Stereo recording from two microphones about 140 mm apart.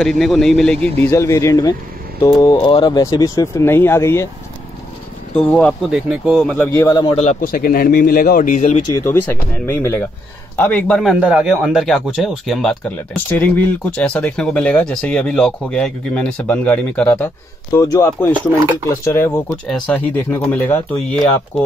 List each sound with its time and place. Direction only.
0.0 s speech: centre (ahead or behind)
1.0 s speech: 20° left (ahead or behind)
5.5 s speech: 5° left (ahead or behind)
5.9 s speech: 5° right (ahead or behind)
6.7 s speech: 25° left (ahead or behind)
7.1 s a man's voice: 50° left (ahead or behind)
7.4 s speech: 90° left; by 8.7 s 65° left (ahead or behind)
8.9 s speech: 15° left (ahead or behind)
11.1 s speech: 10° right (ahead or behind)
12.8 s speech: 10° left (ahead or behind)
17.7 s speech: 20° left (ahead or behind)